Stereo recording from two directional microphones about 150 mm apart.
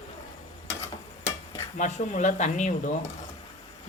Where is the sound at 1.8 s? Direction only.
55° left (ahead or behind).